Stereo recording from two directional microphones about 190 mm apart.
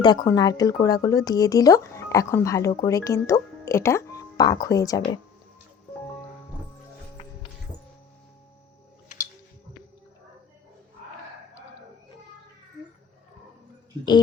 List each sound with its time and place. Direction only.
0.0 s speech: 20° left (ahead or behind)
9.0 s music: 40° left (ahead or behind)